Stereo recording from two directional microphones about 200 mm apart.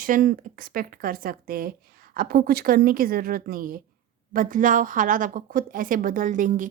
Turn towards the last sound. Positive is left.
turn(degrees=-40)  # may be behind; listen again after turning